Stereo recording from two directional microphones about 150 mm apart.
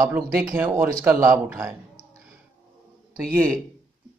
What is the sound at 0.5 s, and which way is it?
A man's voice, 15° right (ahead or behind).